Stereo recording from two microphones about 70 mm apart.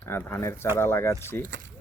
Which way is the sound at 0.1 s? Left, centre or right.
Left.